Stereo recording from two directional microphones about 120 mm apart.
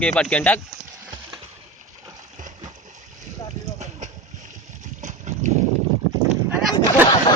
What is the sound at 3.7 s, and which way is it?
Vehicle, 75° right (ahead or behind).